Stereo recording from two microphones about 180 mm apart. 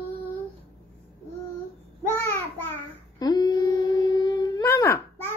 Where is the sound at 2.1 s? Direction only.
15° left (ahead or behind).